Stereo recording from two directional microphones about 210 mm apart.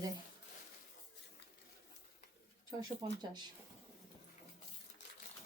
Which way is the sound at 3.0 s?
20° right (ahead or behind).